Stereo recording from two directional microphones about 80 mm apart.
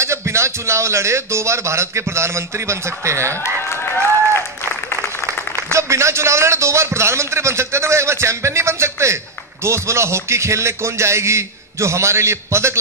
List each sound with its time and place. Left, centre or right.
0.0 s a man's voice: right
3.6 s applause: left
5.6 s a man's voice: right